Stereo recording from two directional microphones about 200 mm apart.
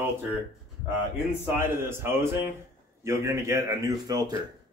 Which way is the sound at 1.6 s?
10° right (ahead or behind).